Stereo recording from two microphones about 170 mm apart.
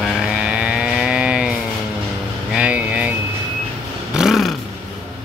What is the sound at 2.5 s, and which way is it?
Vehicle, 5° right (ahead or behind).